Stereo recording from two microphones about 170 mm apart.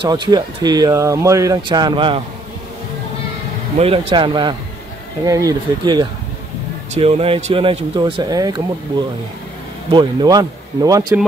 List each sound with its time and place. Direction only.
0.0 s speech: 25° right (ahead or behind)
3.7 s speech: 35° right (ahead or behind)
6.9 s speech: 35° right (ahead or behind)
9.8 s speech: 25° right (ahead or behind)